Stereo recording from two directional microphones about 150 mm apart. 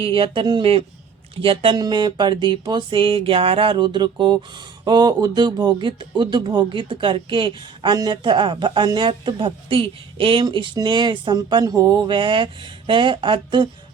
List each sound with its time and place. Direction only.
0.0 s speech: 35° right (ahead or behind)